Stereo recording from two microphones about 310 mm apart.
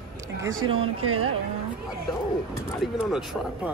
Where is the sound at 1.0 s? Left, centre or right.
Right.